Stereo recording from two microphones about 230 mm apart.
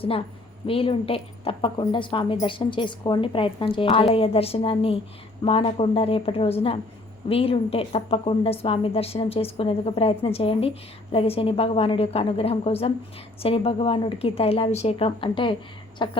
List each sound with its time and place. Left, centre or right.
0.7 s a woman's voice: left